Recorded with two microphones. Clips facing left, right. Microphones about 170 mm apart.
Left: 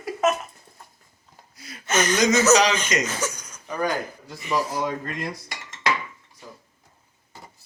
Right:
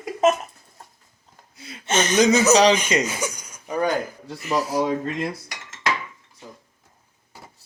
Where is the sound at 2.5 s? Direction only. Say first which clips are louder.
Right 2 dB; 35° right (ahead or behind).